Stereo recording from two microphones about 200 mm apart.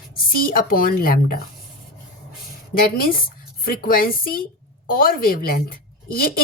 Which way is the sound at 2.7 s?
45° left (ahead or behind).